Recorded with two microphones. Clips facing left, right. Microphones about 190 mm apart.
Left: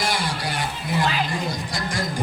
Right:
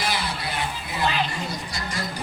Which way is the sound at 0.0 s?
45° left (ahead or behind).